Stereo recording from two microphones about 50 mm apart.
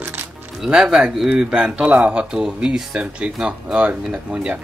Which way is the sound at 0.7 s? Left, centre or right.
Centre.